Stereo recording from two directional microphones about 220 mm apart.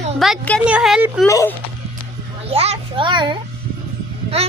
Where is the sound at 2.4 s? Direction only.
30° right (ahead or behind).